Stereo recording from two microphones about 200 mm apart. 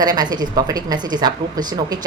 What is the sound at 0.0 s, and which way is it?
Speech, 20° right (ahead or behind).